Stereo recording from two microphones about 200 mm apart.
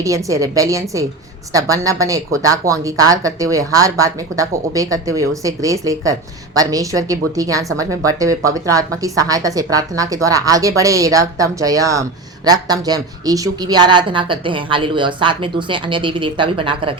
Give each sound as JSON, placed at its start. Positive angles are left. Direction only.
{"t": 0.0, "sound": "a woman's voice", "side_deg": -15}